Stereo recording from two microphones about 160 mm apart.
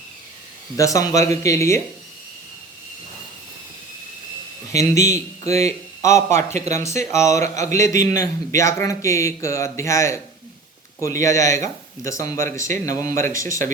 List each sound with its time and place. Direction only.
0.8 s a man's voice: 20° left (ahead or behind)
4.7 s a man's voice: 20° left (ahead or behind)